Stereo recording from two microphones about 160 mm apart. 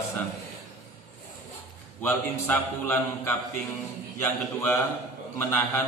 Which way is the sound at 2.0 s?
15° left (ahead or behind).